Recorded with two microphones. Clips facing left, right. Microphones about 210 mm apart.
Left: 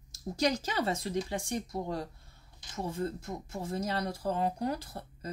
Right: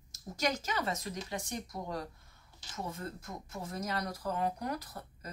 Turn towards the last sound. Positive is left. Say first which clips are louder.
# left 2 dB
turn(degrees=30)  # may be behind; listen again after turning